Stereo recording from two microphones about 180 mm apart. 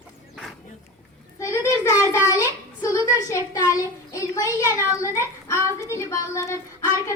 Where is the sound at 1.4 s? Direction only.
15° left (ahead or behind).